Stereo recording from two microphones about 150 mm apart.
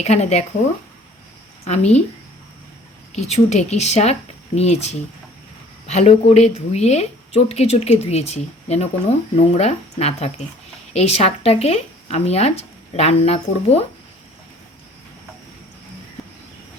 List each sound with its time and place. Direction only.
0.0 s a woman's voice: 45° left (ahead or behind)
1.6 s a woman's voice: 45° left (ahead or behind)
3.2 s a woman's voice: 45° left (ahead or behind)